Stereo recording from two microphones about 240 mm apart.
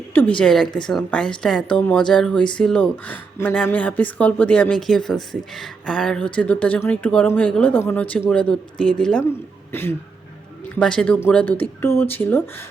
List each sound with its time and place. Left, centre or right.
0.1 s speech: centre